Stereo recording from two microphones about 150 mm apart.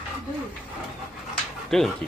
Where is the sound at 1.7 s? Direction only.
5° left (ahead or behind).